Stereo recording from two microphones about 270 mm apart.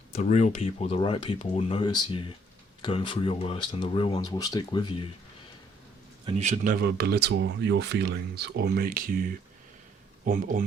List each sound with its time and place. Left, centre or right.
0.2 s speech: left
6.2 s speech: right